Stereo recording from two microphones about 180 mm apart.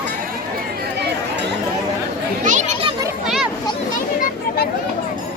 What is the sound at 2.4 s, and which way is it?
Children playing, 40° right (ahead or behind).